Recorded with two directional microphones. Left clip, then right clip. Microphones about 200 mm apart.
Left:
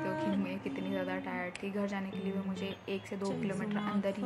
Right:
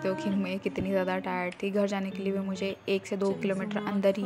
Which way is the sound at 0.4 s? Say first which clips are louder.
Right 6 dB; 40° right (ahead or behind).